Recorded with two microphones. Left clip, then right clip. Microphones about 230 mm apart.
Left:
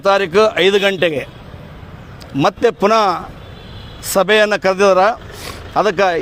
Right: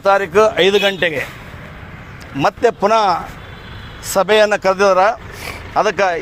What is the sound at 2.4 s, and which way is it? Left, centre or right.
Speech, left.